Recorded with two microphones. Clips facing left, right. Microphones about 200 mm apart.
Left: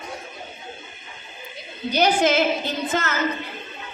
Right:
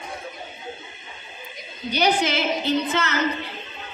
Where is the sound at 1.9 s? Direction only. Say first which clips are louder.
Left 3 dB; 50° left (ahead or behind).